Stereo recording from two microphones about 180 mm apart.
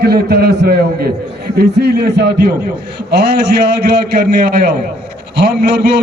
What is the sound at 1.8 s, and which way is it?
A man's voice, 65° right (ahead or behind).